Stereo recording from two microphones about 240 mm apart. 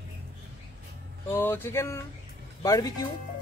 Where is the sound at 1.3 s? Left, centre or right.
Centre.